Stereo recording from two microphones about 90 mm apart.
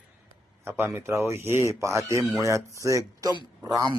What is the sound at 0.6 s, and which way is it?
Speech, 30° right (ahead or behind).